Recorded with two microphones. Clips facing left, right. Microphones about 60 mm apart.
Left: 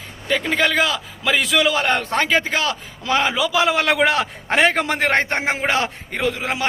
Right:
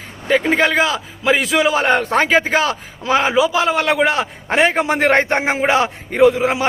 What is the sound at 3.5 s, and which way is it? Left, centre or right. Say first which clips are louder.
A man's voice: right 1 dB; centre.